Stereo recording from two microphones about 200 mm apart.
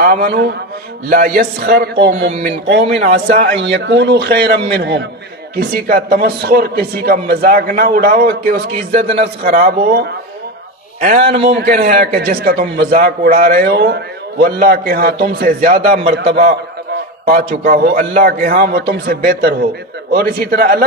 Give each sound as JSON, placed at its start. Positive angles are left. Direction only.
{"t": 0.0, "sound": "a man's voice", "side_deg": -45}
{"t": 2.2, "sound": "a man's voice", "side_deg": -35}
{"t": 3.8, "sound": "a man's voice", "side_deg": -60}
{"t": 9.0, "sound": "speech", "side_deg": -30}
{"t": 9.4, "sound": "a man's voice", "side_deg": -45}
{"t": 11.0, "sound": "a man's voice", "side_deg": -35}
{"t": 11.4, "sound": "a man's voice", "side_deg": -45}